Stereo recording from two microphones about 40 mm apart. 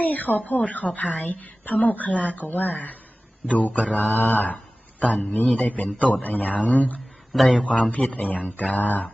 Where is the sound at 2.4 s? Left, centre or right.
Left.